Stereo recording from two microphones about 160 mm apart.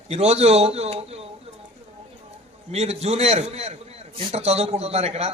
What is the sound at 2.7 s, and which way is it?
A man's voice, 40° right (ahead or behind).